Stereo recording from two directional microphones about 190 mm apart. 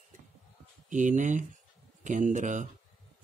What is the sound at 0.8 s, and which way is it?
Speech, 40° right (ahead or behind).